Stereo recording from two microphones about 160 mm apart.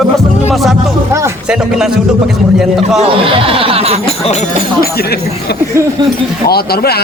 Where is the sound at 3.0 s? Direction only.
35° right (ahead or behind).